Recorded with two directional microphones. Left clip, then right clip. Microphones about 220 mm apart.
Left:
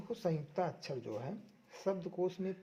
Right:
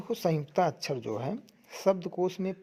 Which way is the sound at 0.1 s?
35° right (ahead or behind).